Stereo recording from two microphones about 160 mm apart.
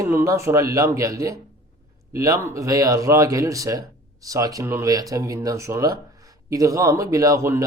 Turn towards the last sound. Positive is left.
turn(degrees=-20)  # may be behind; listen again after turning